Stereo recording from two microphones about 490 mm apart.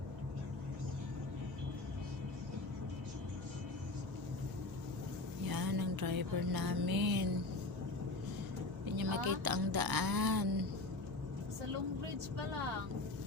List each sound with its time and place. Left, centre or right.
5.5 s music: right
9.0 s speech: right